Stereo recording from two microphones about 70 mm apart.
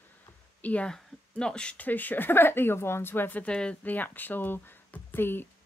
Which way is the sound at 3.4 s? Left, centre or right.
Centre.